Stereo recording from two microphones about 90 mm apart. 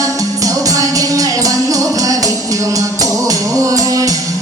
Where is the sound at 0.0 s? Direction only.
40° right (ahead or behind).